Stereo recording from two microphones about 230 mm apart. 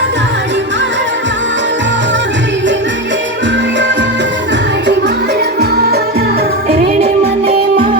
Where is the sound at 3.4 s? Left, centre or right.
Right.